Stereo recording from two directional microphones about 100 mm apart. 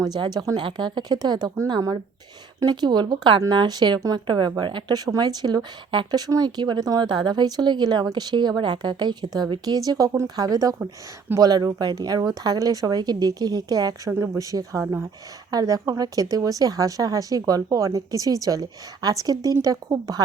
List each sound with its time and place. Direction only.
0.0 s a woman's voice: 45° right (ahead or behind)